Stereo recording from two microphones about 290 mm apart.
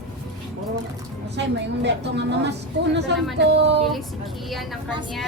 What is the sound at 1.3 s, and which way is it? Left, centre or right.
A woman's voice, right.